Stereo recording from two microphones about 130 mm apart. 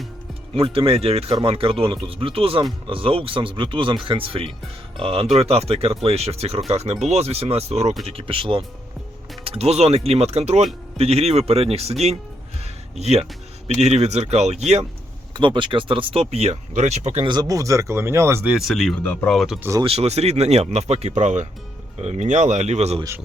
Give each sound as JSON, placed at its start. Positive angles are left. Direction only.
{"t": 0.5, "sound": "speech", "side_deg": -45}
{"t": 15.3, "sound": "speech", "side_deg": -40}
{"t": 17.2, "sound": "speech", "side_deg": -30}
{"t": 18.4, "sound": "speech", "side_deg": -5}
{"t": 18.9, "sound": "speech", "side_deg": 10}
{"t": 19.3, "sound": "speech", "side_deg": 0}
{"t": 19.8, "sound": "speech", "side_deg": -50}